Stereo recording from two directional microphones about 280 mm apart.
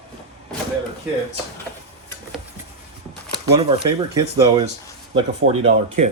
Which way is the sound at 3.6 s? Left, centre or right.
Centre.